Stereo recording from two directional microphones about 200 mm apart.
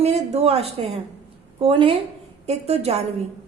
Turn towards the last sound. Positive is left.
turn(degrees=-30)  # may be behind; listen again after turning